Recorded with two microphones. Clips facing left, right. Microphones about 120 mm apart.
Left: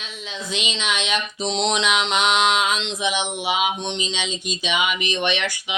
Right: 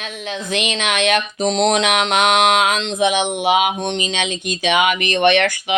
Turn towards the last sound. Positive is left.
turn(degrees=-55)  # may be behind; listen again after turning